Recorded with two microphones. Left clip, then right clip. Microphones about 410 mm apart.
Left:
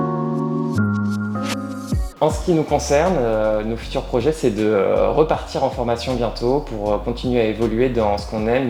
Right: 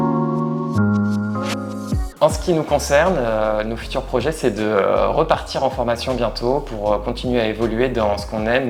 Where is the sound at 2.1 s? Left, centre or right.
Right.